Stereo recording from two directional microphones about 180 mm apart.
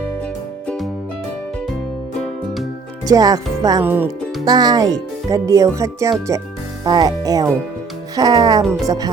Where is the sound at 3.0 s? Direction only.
20° right (ahead or behind).